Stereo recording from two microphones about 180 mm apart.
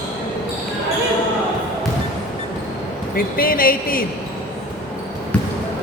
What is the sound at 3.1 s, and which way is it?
Speech, 55° left (ahead or behind).